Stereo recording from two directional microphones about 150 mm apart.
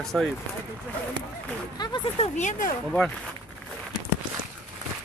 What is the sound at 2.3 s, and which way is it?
Speech, 55° left (ahead or behind).